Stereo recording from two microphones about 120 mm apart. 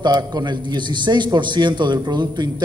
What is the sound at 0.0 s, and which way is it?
A man's voice, 35° right (ahead or behind).